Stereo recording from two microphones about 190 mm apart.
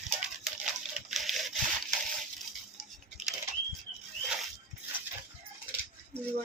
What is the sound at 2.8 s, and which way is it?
Coin, 5° right (ahead or behind).